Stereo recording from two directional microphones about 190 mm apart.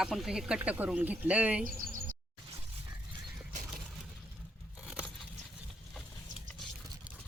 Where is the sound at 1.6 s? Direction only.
45° right (ahead or behind).